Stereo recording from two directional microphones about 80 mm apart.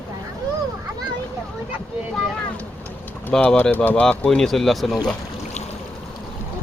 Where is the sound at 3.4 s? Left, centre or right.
Centre.